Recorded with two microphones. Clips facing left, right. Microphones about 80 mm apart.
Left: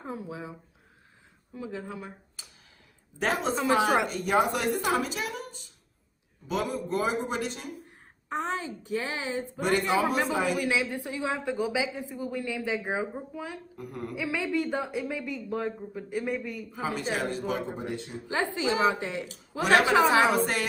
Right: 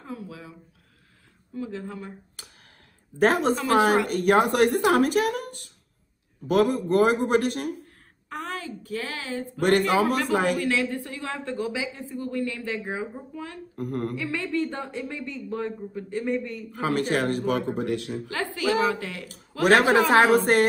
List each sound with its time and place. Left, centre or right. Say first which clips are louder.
0.0 s a woman's voice: left 1 dB; left
1.5 s speech: right 3 dB; centre
2.4 s a sound: right 4 dB; right
3.2 s a woman's voice: right 6 dB; right
8.3 s a woman's voice: left 2 dB; left
9.6 s a man's voice: right 5 dB; right
10.6 s speech: right 3 dB; centre
13.7 s a woman's voice: right 11 dB; right
14.1 s speech: right 1 dB; centre
16.7 s a man's voice: right 6 dB; right
18.3 s a woman's voice: right 2 dB; left
19.6 s a woman's voice: right 3 dB; right